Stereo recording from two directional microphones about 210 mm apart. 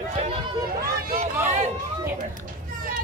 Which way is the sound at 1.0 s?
45° right (ahead or behind).